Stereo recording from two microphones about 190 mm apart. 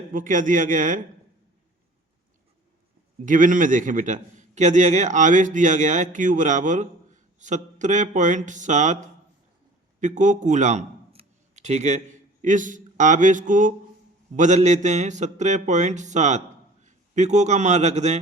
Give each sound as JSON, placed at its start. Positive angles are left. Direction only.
{"t": 0.1, "sound": "a man's voice", "side_deg": -45}
{"t": 3.2, "sound": "a man's voice", "side_deg": -45}